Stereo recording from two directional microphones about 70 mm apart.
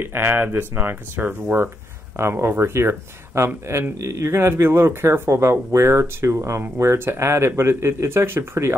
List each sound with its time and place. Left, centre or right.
0.0 s speech: right